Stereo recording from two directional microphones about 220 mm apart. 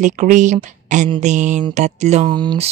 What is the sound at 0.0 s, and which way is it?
Speech, 35° right (ahead or behind).